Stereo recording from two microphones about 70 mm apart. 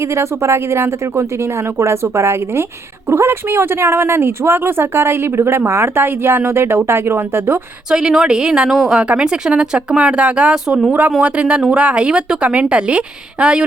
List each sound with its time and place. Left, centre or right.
0.0 s speech: right
7.9 s a woman's voice: centre